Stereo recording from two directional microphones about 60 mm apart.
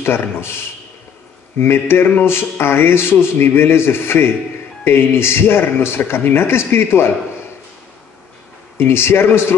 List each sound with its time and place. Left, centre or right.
0.0 s a man's voice: left
8.7 s a man's voice: left